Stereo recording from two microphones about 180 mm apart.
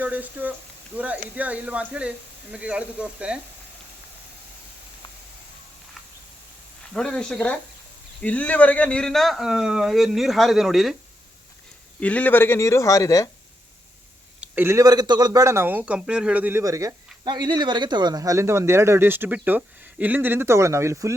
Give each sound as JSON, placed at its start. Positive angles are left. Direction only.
{"t": 0.0, "sound": "speech", "side_deg": -10}
{"t": 6.9, "sound": "speech", "side_deg": 5}
{"t": 11.9, "sound": "speech", "side_deg": 10}
{"t": 14.4, "sound": "speech", "side_deg": -10}